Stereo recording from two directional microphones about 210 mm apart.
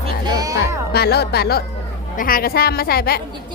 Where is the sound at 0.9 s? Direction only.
50° left (ahead or behind).